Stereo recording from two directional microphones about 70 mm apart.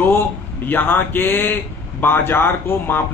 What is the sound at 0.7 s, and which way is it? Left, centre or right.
A man's voice, left.